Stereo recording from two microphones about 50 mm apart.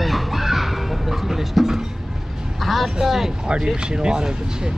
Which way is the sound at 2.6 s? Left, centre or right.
Centre.